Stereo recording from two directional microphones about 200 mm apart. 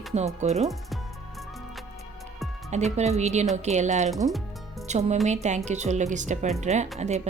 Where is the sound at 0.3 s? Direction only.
35° right (ahead or behind).